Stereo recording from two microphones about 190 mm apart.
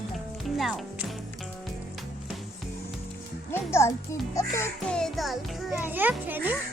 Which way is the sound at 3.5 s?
15° left (ahead or behind).